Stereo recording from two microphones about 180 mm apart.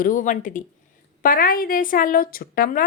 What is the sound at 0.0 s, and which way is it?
Speech, 50° left (ahead or behind).